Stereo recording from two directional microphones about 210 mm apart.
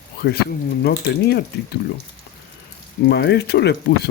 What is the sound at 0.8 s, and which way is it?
Speech, 50° left (ahead or behind).